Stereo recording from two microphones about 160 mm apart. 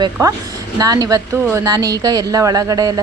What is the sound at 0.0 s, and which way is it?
A woman's voice, 20° right (ahead or behind).